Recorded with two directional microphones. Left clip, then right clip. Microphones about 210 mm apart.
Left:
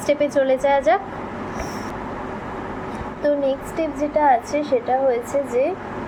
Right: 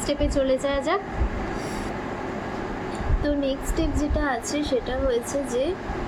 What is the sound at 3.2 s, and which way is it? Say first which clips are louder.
Speech: left 7 dB; 20° right (ahead or behind).